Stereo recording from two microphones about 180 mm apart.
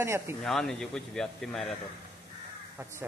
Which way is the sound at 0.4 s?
5° left (ahead or behind).